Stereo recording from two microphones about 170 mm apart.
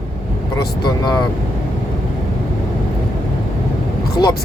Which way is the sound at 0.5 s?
25° left (ahead or behind).